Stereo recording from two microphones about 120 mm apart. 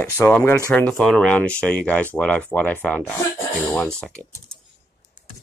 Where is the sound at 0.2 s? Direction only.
25° left (ahead or behind).